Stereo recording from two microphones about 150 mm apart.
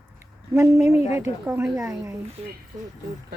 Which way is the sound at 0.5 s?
20° right (ahead or behind).